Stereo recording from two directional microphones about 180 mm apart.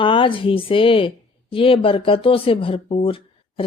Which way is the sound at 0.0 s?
30° left (ahead or behind).